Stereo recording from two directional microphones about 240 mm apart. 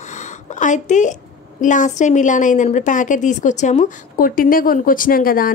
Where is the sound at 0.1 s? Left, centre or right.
Left.